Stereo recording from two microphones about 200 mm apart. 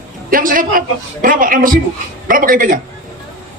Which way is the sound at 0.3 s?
45° right (ahead or behind).